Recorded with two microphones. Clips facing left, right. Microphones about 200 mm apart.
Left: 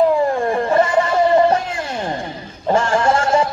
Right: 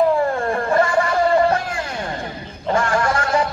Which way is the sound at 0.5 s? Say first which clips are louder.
Left 2 dB; 20° left (ahead or behind).